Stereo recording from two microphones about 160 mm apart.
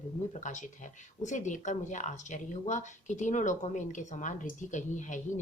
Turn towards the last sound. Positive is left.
turn(degrees=50)  # may be behind; listen again after turning